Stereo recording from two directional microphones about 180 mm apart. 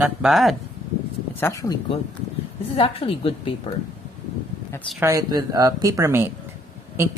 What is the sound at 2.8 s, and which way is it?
Speech, 30° left (ahead or behind).